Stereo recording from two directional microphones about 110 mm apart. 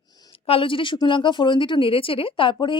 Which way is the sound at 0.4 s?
55° left (ahead or behind).